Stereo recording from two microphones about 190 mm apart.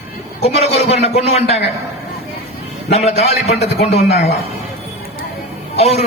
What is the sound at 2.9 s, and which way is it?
A man's voice, 35° left (ahead or behind).